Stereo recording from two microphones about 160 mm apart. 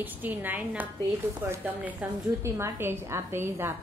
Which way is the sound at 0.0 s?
10° right (ahead or behind).